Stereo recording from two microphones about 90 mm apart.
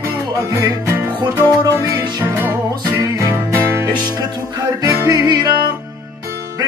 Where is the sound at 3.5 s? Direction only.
30° right (ahead or behind).